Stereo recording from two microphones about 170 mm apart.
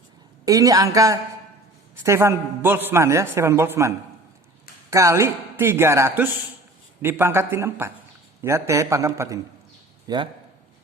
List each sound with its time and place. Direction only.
0.4 s a man's voice: 20° right (ahead or behind)